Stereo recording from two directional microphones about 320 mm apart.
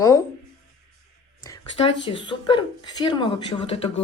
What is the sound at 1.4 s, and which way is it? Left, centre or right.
A woman's voice, centre.